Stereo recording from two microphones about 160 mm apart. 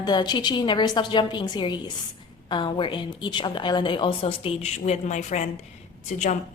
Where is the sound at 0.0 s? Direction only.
25° left (ahead or behind).